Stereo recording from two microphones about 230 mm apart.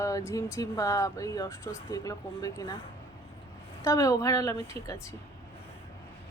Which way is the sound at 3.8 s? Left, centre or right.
Centre.